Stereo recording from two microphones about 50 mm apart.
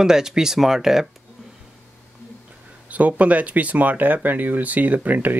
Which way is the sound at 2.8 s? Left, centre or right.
Right.